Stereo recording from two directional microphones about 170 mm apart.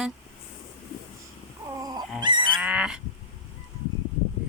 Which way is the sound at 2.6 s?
5° right (ahead or behind).